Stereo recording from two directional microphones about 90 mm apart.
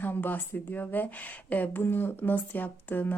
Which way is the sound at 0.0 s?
20° left (ahead or behind).